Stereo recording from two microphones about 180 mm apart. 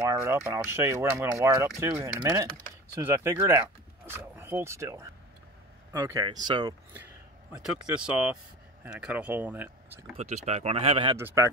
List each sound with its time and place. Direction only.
0.1 s speech: 15° right (ahead or behind)
7.5 s speech: 5° right (ahead or behind)
10.1 s speech: 40° right (ahead or behind)
11.1 s speech: 15° right (ahead or behind)